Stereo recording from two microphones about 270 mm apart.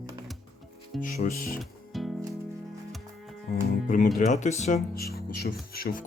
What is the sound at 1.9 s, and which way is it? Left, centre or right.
Music, centre.